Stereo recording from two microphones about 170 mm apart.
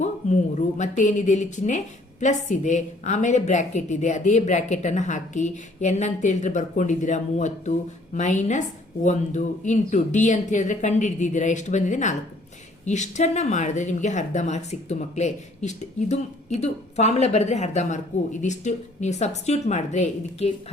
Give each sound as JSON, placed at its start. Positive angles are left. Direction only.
{"t": 0.0, "sound": "a woman's voice", "side_deg": 45}